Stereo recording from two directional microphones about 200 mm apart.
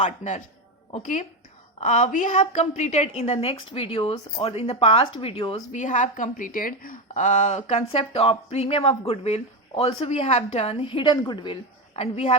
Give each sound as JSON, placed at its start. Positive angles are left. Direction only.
{"t": 0.0, "sound": "a woman's voice", "side_deg": 35}